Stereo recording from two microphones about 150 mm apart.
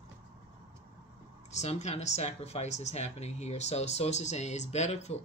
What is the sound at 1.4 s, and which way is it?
Speech, 50° left (ahead or behind).